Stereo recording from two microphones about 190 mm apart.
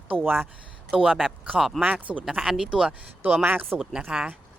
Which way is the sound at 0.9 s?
Centre (ahead or behind).